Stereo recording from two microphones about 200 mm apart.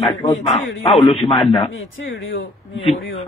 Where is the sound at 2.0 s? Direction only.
80° left.